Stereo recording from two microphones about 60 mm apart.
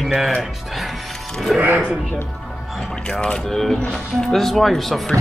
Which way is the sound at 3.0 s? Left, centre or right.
Centre.